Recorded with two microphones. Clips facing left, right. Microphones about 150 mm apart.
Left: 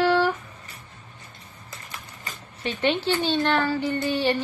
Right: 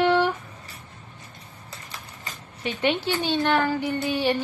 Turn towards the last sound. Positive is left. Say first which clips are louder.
# even
turn(degrees=-10)  # may be behind; listen again after turning